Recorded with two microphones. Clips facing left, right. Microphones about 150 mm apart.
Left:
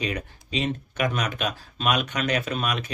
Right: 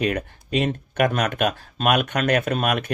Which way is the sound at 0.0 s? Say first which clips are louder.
Right 6 dB; 55° right (ahead or behind).